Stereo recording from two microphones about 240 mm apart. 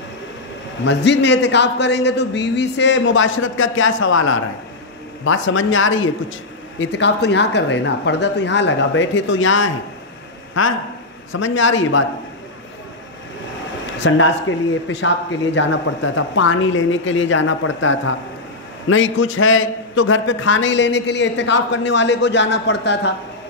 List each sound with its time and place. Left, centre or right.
0.8 s a man's voice: left
14.0 s a man's voice: left